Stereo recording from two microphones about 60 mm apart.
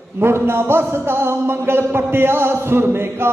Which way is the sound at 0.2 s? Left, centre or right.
Right.